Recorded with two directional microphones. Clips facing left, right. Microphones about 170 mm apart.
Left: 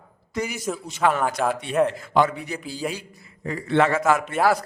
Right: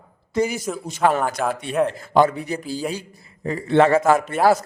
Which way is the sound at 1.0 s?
40° right (ahead or behind).